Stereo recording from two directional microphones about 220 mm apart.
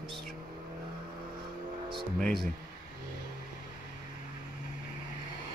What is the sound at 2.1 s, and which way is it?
Speech, centre (ahead or behind).